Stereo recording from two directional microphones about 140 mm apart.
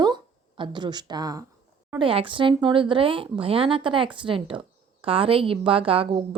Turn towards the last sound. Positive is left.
turn(degrees=-40)  # may be behind; listen again after turning